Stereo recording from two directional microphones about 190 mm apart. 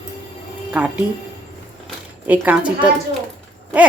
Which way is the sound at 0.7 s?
10° right (ahead or behind).